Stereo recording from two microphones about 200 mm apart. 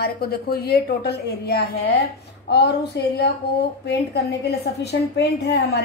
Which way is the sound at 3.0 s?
60° left (ahead or behind).